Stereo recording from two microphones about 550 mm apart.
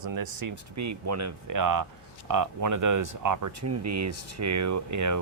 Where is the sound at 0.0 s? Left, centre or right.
Right.